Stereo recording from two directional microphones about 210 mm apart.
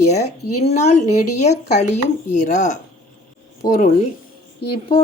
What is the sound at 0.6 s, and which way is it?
Speech, 30° left (ahead or behind).